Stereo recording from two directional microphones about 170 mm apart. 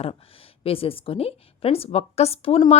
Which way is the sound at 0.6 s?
35° left (ahead or behind).